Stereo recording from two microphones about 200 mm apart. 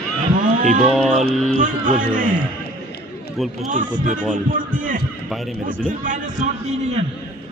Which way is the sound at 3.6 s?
40° right (ahead or behind).